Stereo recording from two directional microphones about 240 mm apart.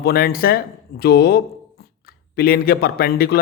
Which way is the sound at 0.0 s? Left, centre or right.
Left.